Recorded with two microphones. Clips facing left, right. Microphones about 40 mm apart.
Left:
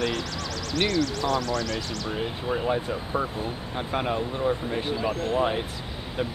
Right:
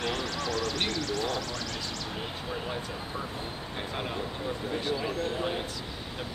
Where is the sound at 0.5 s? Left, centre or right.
Right.